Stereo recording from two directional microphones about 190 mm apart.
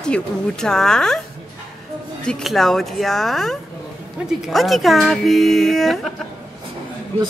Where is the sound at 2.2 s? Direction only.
Centre (ahead or behind).